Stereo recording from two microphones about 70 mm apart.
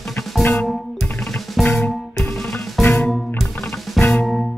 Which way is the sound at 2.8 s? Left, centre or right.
Left.